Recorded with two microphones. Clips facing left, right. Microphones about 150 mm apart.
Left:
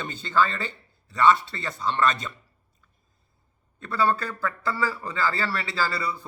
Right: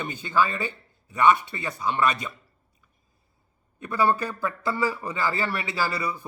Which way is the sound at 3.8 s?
15° right (ahead or behind).